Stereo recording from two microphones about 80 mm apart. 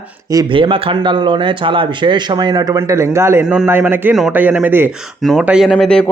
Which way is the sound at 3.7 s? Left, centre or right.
Right.